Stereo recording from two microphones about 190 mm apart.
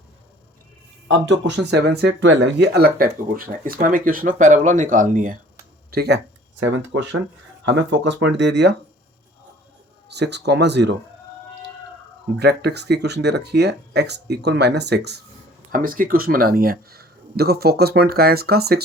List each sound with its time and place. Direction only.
1.0 s speech: 75° right (ahead or behind); by 5.4 s 45° right (ahead or behind)
5.9 s speech: 55° right (ahead or behind)
6.6 s speech: 75° right (ahead or behind)
10.1 s speech: 65° right (ahead or behind)
12.4 s speech: 60° right (ahead or behind)
15.7 s speech: 45° right (ahead or behind)